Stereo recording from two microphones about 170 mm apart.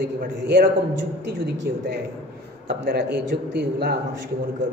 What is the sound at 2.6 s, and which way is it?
A man's voice, 75° right (ahead or behind).